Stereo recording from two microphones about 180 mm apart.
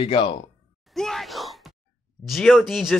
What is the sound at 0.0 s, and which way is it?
Speech, 30° left (ahead or behind).